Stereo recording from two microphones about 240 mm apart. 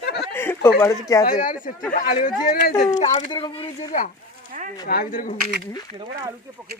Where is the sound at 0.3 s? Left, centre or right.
Centre.